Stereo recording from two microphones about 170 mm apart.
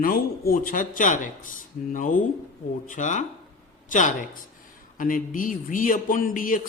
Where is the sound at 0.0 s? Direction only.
55° left (ahead or behind).